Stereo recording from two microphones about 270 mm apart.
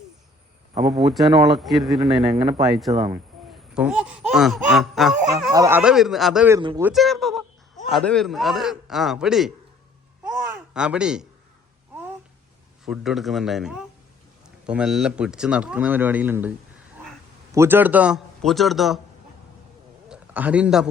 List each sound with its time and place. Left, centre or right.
0.9 s speech: centre
2.3 s speech: centre
3.8 s speech: centre
6.6 s speech: centre
6.8 s speech: centre
10.2 s babbling: centre
12.8 s speech: centre
17.5 s speech: centre
20.1 s a sound: centre